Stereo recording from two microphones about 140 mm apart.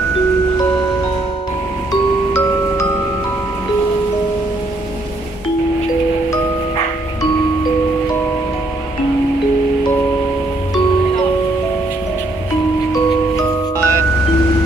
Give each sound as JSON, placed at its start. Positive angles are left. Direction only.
{"t": 1.9, "sound": "glockenspiel", "side_deg": 20}
{"t": 12.9, "sound": "music", "side_deg": 25}